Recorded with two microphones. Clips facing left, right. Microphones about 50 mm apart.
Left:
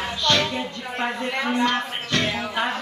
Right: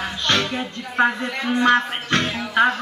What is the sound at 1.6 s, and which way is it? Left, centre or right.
Music, right.